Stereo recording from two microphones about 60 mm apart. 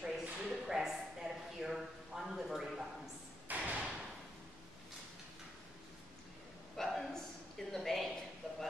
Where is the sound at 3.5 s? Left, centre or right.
Right.